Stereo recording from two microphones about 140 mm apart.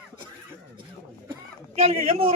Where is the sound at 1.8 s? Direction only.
45° right (ahead or behind).